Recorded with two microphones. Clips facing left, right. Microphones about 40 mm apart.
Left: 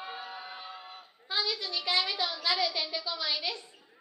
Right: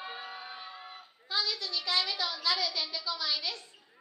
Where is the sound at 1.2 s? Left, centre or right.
Left.